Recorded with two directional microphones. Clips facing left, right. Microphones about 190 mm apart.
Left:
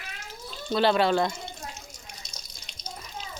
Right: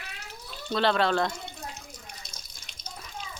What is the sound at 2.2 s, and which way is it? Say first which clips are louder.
Water: left 1 dB; 55° right (ahead or behind).